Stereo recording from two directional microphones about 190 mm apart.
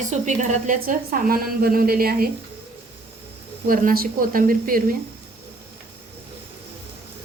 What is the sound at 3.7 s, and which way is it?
A woman's voice, 50° right (ahead or behind).